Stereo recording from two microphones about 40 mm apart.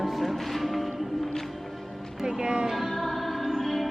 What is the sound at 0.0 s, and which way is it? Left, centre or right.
Music, centre.